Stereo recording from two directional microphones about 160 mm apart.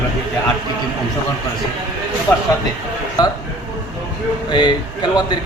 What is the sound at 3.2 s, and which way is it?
Speech, 25° left (ahead or behind).